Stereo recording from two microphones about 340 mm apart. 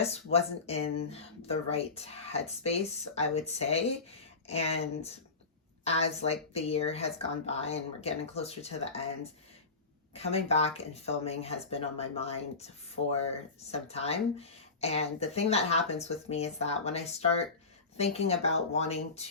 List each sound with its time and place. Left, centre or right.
0.0 s speech: centre
10.2 s speech: centre